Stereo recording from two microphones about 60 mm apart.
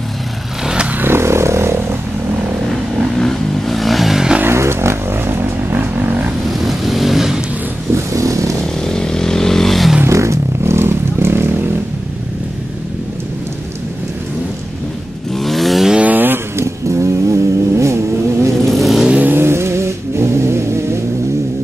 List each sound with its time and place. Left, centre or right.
0.7 s vehicle: centre
0.9 s a sound: right
3.2 s vehicle: centre
4.4 s vehicle: right
6.6 s vehicle: centre
7.9 s vehicle: right
8.8 s vehicle: centre
10.0 s vehicle: right
15.3 s a sound: centre
15.9 s vehicle: right
16.5 s vehicle: right
18.7 s vehicle: centre
19.2 s vehicle: right